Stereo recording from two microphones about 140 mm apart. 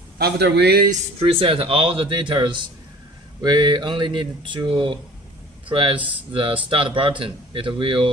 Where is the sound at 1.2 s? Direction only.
40° right (ahead or behind).